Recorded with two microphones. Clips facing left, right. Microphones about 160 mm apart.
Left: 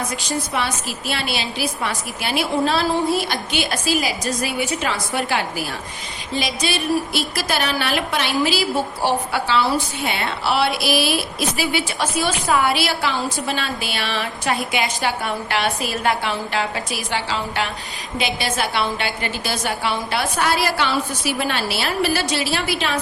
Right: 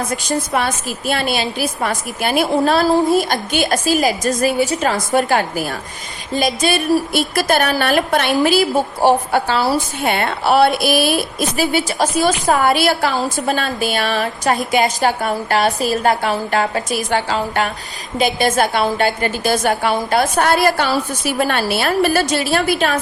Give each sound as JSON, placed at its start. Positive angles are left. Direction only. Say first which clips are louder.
{"t": 0.1, "sound": "a woman's voice", "louder": "right 5 dB", "side_deg": -50}